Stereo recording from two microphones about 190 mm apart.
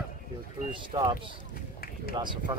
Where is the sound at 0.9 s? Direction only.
30° right (ahead or behind).